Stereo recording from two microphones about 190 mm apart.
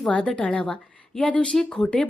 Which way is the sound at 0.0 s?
5° left (ahead or behind).